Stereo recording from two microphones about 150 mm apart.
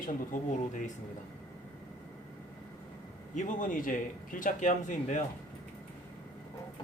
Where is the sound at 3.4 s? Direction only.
60° left (ahead or behind).